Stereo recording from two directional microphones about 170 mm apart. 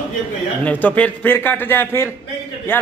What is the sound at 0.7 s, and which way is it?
A man's voice, 10° left (ahead or behind).